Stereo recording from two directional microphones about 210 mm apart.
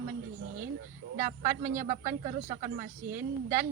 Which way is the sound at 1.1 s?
40° right (ahead or behind).